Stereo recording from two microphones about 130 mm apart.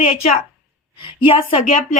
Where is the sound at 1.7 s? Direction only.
60° left (ahead or behind).